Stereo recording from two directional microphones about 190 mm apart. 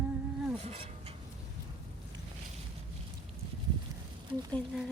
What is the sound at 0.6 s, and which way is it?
Speech, 30° right (ahead or behind).